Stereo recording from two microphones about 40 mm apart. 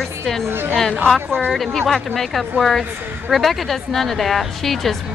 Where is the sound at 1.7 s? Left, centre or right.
Centre.